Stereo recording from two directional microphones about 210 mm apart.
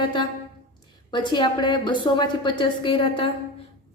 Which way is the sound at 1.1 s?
20° left (ahead or behind).